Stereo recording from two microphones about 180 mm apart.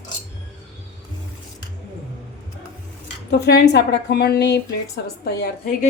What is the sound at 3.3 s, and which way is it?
A woman's voice, 65° left (ahead or behind).